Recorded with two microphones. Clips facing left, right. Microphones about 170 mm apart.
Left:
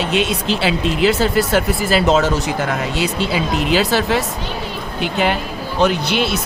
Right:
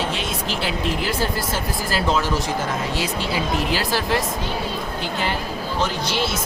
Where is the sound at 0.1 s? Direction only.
75° left (ahead or behind).